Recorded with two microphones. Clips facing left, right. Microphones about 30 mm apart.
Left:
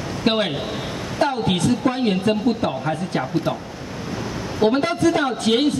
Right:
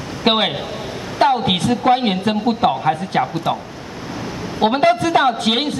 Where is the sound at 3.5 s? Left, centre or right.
Right.